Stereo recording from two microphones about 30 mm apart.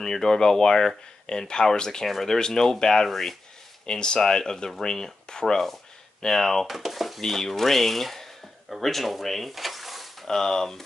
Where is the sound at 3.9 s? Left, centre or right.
Left.